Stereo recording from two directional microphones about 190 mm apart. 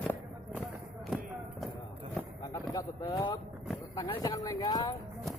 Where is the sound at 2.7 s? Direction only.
15° left (ahead or behind).